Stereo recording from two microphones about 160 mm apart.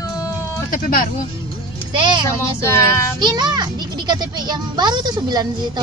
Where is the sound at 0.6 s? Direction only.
60° left (ahead or behind).